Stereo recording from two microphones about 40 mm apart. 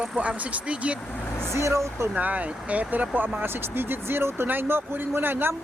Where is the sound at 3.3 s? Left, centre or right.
Right.